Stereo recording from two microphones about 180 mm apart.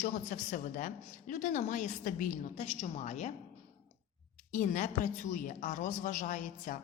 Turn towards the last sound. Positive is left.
turn(degrees=45)  # may be behind; listen again after turning